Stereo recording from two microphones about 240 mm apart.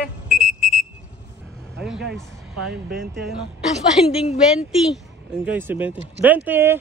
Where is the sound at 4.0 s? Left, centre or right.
Left.